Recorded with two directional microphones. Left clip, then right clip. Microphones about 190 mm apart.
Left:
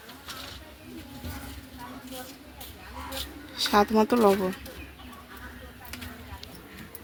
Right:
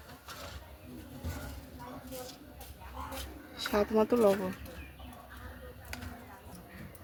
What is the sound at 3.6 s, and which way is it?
Speech, 30° left (ahead or behind).